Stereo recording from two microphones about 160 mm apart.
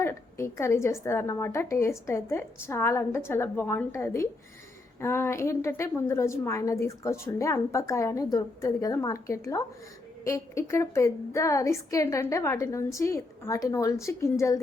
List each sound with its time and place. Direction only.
0.0 s a woman's voice: 15° left (ahead or behind)